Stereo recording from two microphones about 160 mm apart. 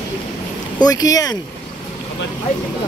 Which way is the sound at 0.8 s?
25° left (ahead or behind).